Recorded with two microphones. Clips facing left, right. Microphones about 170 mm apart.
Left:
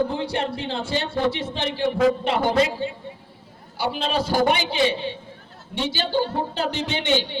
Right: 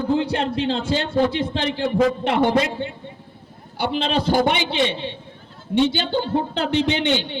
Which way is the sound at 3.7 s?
60° right (ahead or behind).